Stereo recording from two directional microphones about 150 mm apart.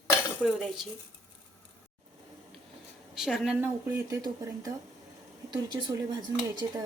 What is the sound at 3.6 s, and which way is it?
Speech, 20° right (ahead or behind).